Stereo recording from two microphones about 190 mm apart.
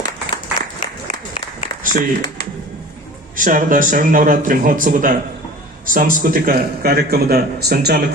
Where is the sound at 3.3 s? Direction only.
45° right (ahead or behind).